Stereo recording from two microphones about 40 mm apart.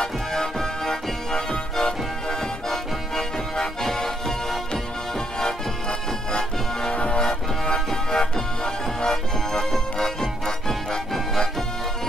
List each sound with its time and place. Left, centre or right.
0.0 s music: centre
5.4 s music: centre